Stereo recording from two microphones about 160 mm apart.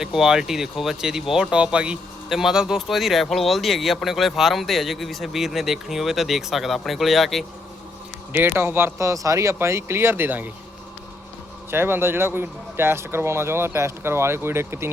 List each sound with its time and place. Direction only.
0.0 s speech: 5° right (ahead or behind)
8.3 s speech: 10° right (ahead or behind)
11.7 s speech: 15° right (ahead or behind)